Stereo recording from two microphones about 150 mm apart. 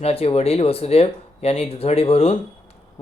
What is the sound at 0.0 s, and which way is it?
Speech, 40° left (ahead or behind).